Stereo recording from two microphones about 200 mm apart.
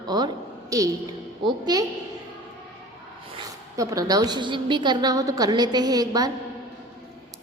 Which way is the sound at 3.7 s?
15° right (ahead or behind).